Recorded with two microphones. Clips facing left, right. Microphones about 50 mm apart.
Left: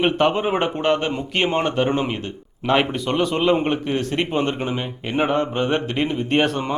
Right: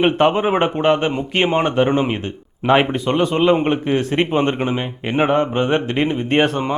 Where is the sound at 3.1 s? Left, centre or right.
Centre.